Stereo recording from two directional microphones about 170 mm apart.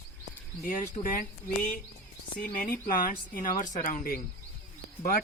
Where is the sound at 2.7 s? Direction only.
55° left (ahead or behind).